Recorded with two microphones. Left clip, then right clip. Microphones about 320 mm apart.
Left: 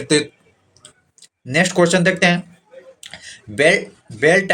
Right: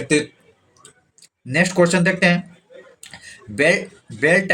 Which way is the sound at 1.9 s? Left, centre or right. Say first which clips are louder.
Left 2 dB; left.